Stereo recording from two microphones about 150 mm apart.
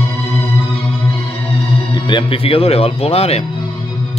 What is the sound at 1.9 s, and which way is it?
Speech, 35° left (ahead or behind).